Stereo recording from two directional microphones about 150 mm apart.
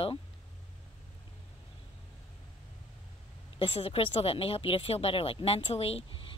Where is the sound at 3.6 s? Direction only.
40° left (ahead or behind).